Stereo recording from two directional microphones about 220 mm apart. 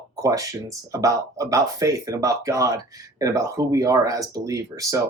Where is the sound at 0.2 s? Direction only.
15° right (ahead or behind).